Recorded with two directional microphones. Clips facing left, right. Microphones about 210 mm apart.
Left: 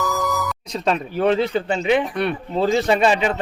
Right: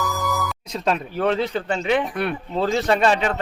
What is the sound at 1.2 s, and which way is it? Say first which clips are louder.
A man's voice: left 4 dB; 10° left (ahead or behind).